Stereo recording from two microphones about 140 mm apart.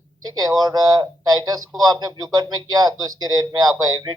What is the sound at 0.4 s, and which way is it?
Speech, 25° right (ahead or behind).